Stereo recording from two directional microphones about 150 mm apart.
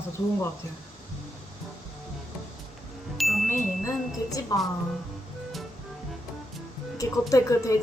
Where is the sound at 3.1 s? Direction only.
Centre (ahead or behind).